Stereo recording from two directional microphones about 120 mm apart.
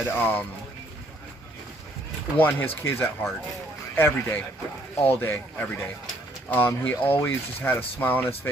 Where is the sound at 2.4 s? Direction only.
15° left (ahead or behind).